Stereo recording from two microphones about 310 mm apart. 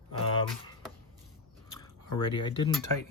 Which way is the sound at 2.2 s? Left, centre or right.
Centre.